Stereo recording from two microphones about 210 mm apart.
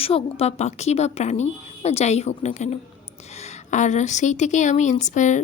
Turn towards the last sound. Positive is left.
turn(degrees=35)  # may be behind; listen again after turning